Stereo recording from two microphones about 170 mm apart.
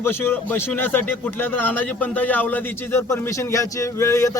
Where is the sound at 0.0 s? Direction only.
15° left (ahead or behind).